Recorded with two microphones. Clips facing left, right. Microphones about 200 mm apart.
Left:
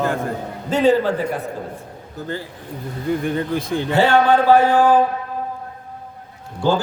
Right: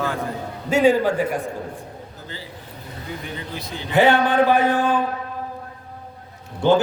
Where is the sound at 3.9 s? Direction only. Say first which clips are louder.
Left 1 dB; 15° right (ahead or behind).